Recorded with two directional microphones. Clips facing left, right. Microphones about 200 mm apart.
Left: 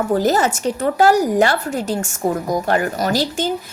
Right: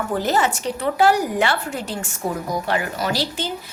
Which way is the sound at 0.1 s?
40° left (ahead or behind).